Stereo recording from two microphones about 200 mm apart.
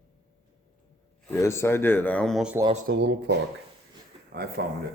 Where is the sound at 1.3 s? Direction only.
15° left (ahead or behind).